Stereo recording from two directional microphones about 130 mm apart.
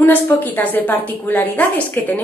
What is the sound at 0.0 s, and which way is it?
A woman's voice, 15° left (ahead or behind).